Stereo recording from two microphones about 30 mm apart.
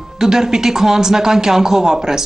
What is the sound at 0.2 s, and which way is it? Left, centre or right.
A man's voice, centre.